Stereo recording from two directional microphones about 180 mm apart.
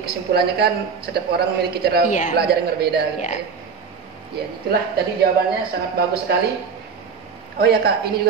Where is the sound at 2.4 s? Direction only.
60° right (ahead or behind).